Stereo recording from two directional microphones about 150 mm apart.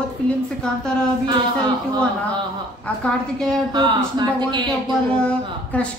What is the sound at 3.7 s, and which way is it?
Speech, 30° right (ahead or behind).